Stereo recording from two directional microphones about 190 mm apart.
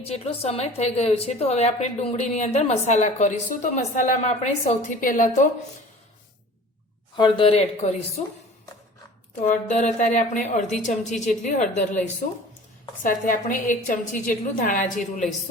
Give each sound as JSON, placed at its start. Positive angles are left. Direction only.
{"t": 0.0, "sound": "a woman's voice", "side_deg": 30}
{"t": 7.2, "sound": "a woman's voice", "side_deg": 25}
{"t": 9.4, "sound": "a woman's voice", "side_deg": 40}